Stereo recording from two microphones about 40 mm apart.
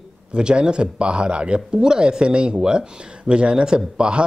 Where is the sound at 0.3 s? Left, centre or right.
Right.